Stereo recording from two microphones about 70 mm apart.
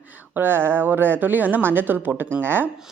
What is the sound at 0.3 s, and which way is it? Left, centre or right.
A woman's voice, right.